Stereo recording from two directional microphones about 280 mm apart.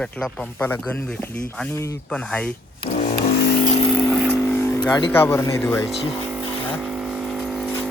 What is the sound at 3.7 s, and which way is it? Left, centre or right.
Vehicle, centre.